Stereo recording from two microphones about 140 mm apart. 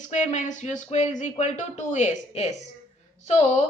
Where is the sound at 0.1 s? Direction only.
55° left (ahead or behind).